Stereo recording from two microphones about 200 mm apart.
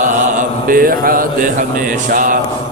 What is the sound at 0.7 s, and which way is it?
Mantra, 45° right (ahead or behind).